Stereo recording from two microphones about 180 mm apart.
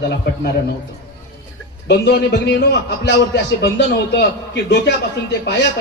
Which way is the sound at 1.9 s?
70° left (ahead or behind).